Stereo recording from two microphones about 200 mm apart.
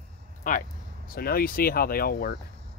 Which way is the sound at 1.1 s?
50° left (ahead or behind).